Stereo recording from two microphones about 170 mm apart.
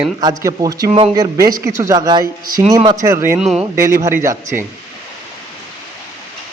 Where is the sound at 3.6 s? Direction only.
15° right (ahead or behind).